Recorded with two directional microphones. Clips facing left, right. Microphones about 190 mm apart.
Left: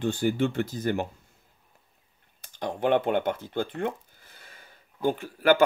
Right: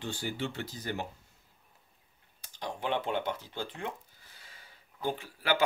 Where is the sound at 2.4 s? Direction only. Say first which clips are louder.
Left 8 dB; 55° left (ahead or behind).